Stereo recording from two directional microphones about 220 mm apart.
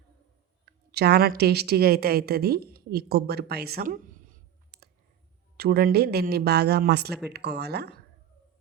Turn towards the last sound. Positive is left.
turn(degrees=-50)  # may be behind; listen again after turning